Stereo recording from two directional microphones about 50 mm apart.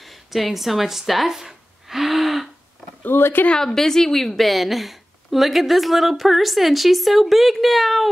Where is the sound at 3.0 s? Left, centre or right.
Left.